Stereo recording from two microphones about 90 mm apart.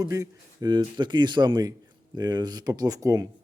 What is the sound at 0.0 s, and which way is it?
Speech, 45° right (ahead or behind).